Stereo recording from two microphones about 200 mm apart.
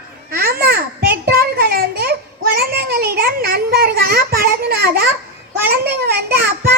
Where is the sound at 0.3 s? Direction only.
50° right (ahead or behind).